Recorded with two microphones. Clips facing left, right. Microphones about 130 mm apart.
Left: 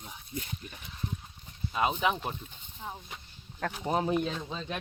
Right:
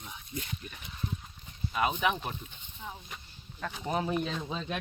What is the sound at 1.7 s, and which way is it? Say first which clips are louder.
Speech: left 1 dB; 25° left (ahead or behind).